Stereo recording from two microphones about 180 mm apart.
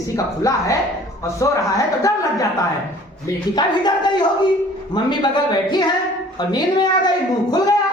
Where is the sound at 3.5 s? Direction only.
25° left (ahead or behind).